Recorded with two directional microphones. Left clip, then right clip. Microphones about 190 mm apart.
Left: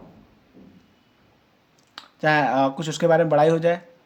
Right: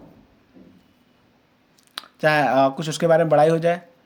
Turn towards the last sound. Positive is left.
turn(degrees=-20)  # may be behind; listen again after turning